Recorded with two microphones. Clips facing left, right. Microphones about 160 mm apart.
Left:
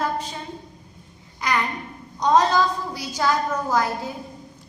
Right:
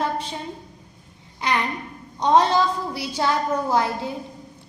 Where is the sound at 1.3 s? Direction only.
25° right (ahead or behind).